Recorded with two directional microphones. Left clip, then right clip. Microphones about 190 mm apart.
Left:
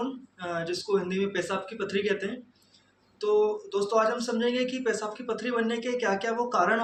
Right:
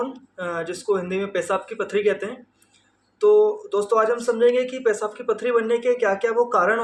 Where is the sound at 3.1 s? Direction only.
15° left (ahead or behind).